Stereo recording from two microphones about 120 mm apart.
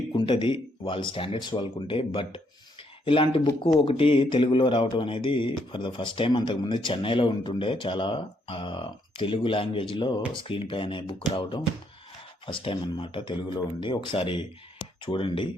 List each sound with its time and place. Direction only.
0.1 s speech: 40° left (ahead or behind)